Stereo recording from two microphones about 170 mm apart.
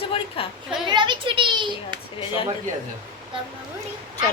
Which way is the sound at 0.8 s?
25° right (ahead or behind).